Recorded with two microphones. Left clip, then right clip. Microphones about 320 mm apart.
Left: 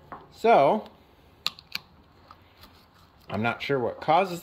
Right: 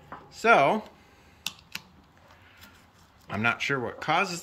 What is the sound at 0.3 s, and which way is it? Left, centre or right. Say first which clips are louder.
Speech: left 1 dB; centre.